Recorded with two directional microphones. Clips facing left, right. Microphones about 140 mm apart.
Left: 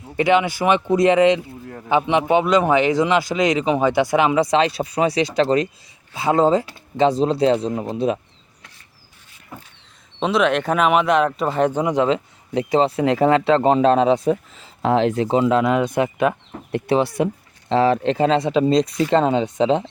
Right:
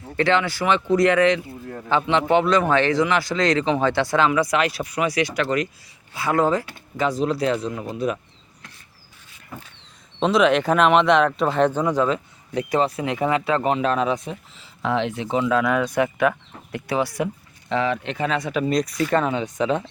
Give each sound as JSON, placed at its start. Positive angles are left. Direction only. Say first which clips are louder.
{"t": 0.2, "sound": "speech", "louder": "left 3 dB", "side_deg": 15}
{"t": 10.2, "sound": "speech", "louder": "right 1 dB", "side_deg": 0}
{"t": 14.3, "sound": "speech", "louder": "left 13 dB", "side_deg": 45}
{"t": 17.7, "sound": "speech", "louder": "left 6 dB", "side_deg": 35}